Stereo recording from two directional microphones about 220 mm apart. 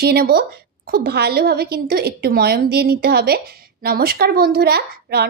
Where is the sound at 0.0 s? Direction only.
45° right (ahead or behind).